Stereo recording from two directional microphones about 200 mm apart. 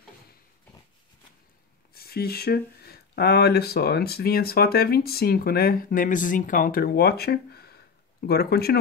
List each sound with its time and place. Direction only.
2.0 s speech: 50° left (ahead or behind)